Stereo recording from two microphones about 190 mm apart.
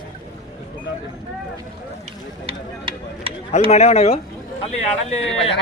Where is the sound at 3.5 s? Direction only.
35° left (ahead or behind).